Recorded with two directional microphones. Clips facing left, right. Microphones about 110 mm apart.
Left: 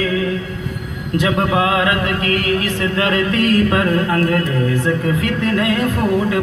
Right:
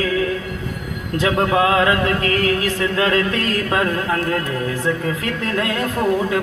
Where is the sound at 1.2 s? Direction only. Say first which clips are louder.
Even; 30° right (ahead or behind).